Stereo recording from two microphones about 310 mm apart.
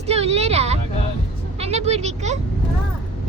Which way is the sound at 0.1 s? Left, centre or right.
Centre.